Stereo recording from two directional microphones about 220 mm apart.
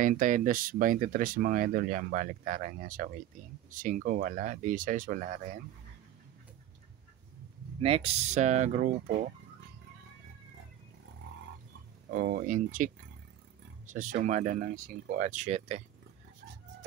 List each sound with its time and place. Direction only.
0.0 s speech: 35° right (ahead or behind)
7.8 s speech: 25° right (ahead or behind)
12.1 s speech: 40° right (ahead or behind)